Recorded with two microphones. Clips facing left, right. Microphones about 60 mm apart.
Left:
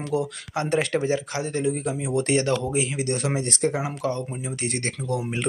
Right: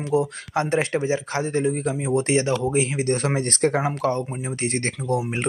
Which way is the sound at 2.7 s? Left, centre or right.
Right.